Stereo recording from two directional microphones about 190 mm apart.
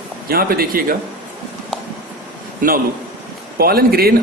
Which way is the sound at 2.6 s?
45° right (ahead or behind).